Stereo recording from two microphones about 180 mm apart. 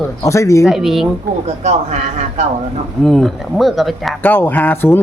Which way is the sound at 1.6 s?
40° right (ahead or behind).